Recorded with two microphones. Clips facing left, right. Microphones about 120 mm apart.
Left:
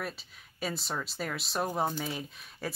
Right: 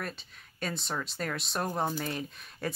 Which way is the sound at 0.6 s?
5° left (ahead or behind).